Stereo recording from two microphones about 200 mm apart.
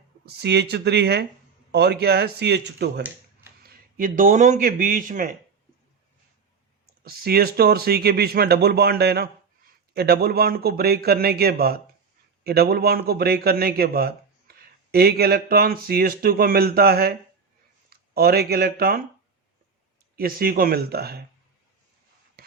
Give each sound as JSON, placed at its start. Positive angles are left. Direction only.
{"t": 0.3, "sound": "speech", "side_deg": -55}
{"t": 3.6, "sound": "speech", "side_deg": -45}
{"t": 7.0, "sound": "speech", "side_deg": -50}
{"t": 20.1, "sound": "speech", "side_deg": -45}
{"t": 22.4, "sound": "a sound", "side_deg": -50}